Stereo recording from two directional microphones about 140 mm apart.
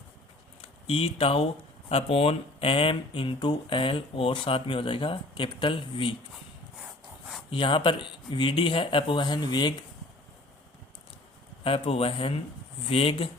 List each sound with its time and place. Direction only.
0.6 s speech: 40° left (ahead or behind)
7.5 s speech: 35° left (ahead or behind)
11.6 s speech: 40° left (ahead or behind)